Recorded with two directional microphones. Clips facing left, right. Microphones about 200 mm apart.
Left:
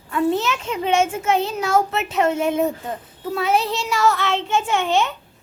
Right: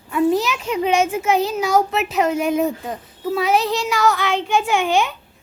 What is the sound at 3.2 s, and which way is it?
A child's voice, centre (ahead or behind).